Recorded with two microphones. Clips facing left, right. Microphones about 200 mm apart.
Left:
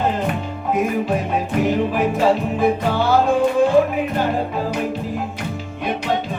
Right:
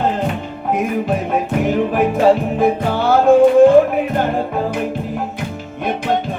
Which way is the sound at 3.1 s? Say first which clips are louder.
Right 8 dB; 55° right (ahead or behind).